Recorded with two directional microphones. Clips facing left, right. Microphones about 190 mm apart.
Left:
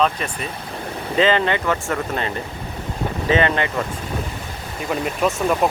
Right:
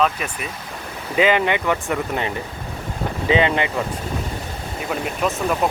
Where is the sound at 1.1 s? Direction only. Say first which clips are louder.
Even; 10° right (ahead or behind).